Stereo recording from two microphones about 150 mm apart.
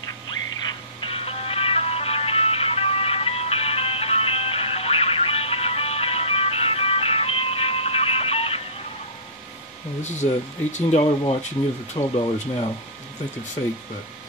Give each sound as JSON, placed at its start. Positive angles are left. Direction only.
{"t": 0.7, "sound": "music", "side_deg": 35}
{"t": 10.0, "sound": "speech", "side_deg": 50}
{"t": 11.0, "sound": "speech", "side_deg": 35}
{"t": 11.9, "sound": "speech", "side_deg": 50}